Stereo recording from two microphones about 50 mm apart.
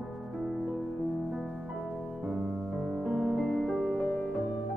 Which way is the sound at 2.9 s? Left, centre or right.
Centre.